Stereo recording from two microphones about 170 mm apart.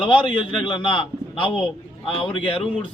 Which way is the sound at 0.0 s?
30° left (ahead or behind).